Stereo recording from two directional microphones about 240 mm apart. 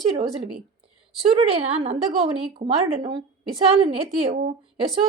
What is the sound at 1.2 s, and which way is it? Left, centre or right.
A woman's voice, right.